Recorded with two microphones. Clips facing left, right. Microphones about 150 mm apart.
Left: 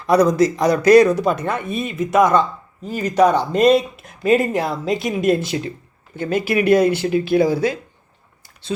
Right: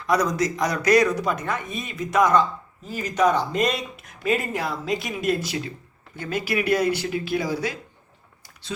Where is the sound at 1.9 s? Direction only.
25° left (ahead or behind).